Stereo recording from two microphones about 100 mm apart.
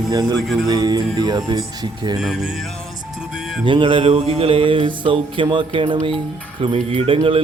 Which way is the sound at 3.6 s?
55° right (ahead or behind).